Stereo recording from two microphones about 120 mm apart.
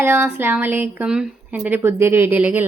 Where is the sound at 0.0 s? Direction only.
20° right (ahead or behind).